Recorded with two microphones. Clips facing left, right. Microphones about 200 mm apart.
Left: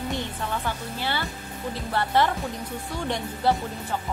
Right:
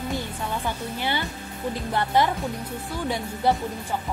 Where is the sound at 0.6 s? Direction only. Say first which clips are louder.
Right 2 dB; 15° right (ahead or behind).